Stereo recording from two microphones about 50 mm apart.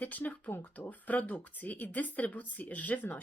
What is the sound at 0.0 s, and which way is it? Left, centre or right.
Speech, left.